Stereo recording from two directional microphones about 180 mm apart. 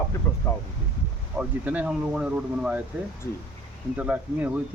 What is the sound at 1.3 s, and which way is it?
Speech, 10° right (ahead or behind).